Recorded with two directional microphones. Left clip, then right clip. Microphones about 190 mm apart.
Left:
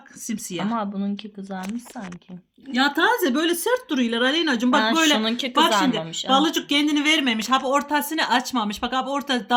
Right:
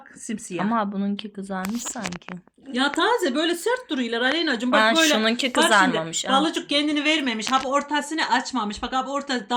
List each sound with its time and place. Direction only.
0.5 s speech: 10° right (ahead or behind)
2.7 s speech: 55° left (ahead or behind)
5.1 s a woman's voice: 5° left (ahead or behind)
6.2 s speech: 60° left (ahead or behind)